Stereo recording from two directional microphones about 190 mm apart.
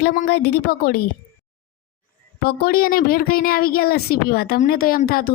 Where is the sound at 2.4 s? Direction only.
50° left (ahead or behind).